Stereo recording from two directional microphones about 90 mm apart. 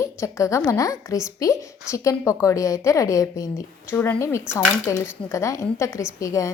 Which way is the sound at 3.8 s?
25° left (ahead or behind).